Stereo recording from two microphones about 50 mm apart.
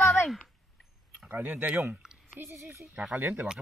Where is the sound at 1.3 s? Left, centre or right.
Right.